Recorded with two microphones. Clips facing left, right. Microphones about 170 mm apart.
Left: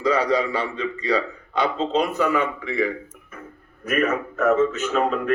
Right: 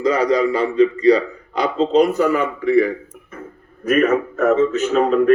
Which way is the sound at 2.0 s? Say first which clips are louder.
Right 6 dB; 40° right (ahead or behind).